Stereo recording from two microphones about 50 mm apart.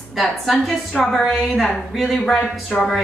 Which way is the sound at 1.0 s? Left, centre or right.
Centre.